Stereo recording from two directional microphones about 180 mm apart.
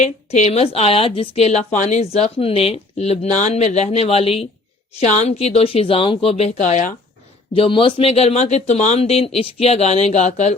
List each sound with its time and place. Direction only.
0.0 s speech: 40° left (ahead or behind)
7.5 s speech: 30° left (ahead or behind)